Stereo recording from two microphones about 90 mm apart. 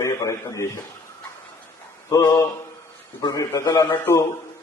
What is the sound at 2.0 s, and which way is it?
Mantra, 35° left (ahead or behind).